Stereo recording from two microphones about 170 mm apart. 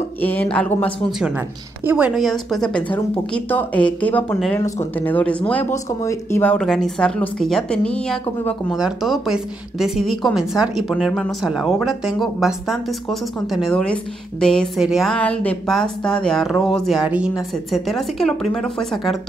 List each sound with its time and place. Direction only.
0.2 s a woman's voice: 10° left (ahead or behind)
1.9 s a woman's voice: 10° right (ahead or behind)